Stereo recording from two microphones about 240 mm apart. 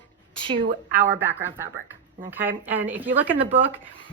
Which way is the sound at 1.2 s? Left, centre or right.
Centre.